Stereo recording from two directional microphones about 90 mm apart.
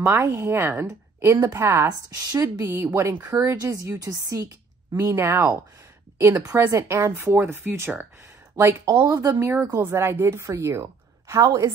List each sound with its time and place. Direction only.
0.0 s speech: 30° right (ahead or behind)
1.9 s speech: 45° right (ahead or behind); by 7.9 s 25° right (ahead or behind)
9.3 s speech: 30° right (ahead or behind)
11.4 s speech: 40° right (ahead or behind)